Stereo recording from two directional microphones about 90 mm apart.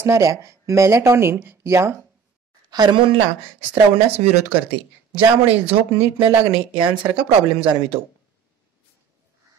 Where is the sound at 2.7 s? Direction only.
55° right (ahead or behind).